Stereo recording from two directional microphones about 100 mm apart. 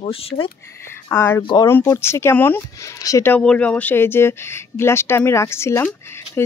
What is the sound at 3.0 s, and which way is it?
Speech, 35° left (ahead or behind).